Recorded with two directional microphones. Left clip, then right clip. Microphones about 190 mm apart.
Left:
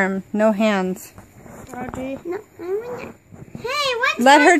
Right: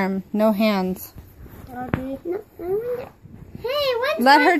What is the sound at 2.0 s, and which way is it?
Speech, 30° left (ahead or behind).